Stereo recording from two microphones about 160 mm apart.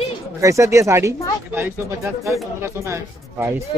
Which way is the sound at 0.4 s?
20° right (ahead or behind).